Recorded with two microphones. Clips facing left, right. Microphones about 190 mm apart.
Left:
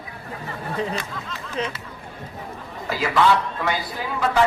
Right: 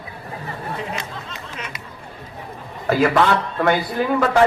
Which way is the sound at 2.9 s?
55° right (ahead or behind).